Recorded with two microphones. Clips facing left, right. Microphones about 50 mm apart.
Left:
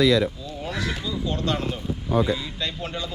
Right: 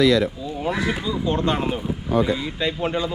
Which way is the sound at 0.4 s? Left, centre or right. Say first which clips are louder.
Right 6 dB; centre.